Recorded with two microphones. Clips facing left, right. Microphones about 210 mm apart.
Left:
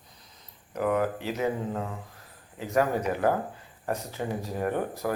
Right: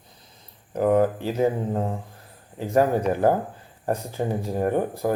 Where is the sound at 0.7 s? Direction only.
30° right (ahead or behind).